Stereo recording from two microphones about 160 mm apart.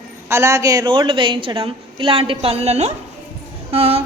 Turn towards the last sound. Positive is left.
turn(degrees=-40)  # may be behind; listen again after turning